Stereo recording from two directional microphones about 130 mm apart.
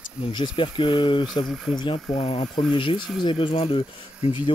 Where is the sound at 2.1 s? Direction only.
50° left (ahead or behind).